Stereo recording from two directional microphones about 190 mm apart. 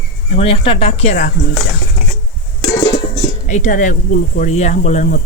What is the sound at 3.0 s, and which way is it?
Speech, 40° left (ahead or behind).